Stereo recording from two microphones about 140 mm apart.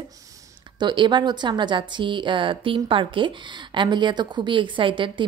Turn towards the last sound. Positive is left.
turn(degrees=-35)  # may be behind; listen again after turning